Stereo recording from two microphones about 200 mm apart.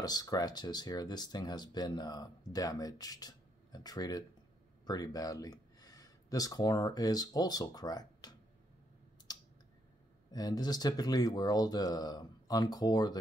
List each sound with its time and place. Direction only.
0.0 s speech: 20° left (ahead or behind)
9.3 s clicking: 20° left (ahead or behind)
10.3 s speech: 20° left (ahead or behind)